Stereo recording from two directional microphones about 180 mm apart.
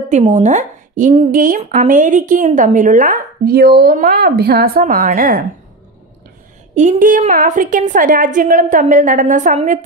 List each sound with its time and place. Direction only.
0.1 s a woman's voice: 40° right (ahead or behind)
6.7 s a woman's voice: 45° right (ahead or behind)